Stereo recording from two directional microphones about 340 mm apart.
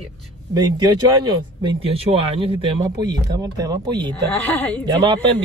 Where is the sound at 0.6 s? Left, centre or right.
Centre.